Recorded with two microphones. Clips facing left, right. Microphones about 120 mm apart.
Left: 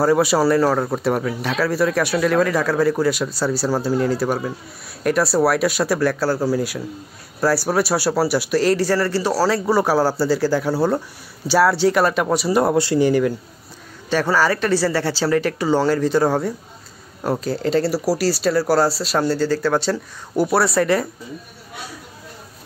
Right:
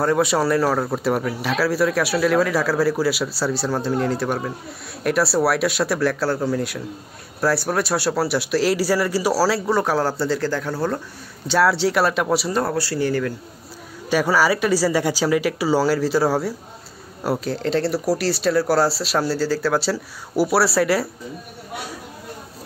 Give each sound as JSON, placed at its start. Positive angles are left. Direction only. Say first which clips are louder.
{"t": 0.0, "sound": "speech", "louder": "left 3 dB", "side_deg": 5}
{"t": 12.5, "sound": "speech", "louder": "left 5 dB", "side_deg": 20}
{"t": 14.1, "sound": "speech", "louder": "even", "side_deg": -10}